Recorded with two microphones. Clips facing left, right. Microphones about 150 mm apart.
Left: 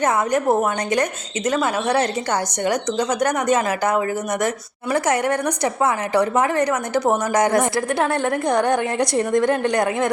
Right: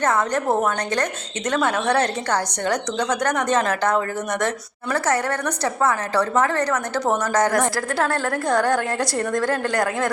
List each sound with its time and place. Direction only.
0.0 s a woman's voice: 10° left (ahead or behind)